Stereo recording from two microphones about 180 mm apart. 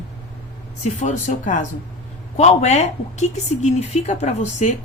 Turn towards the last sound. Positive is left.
turn(degrees=40)  # may be behind; listen again after turning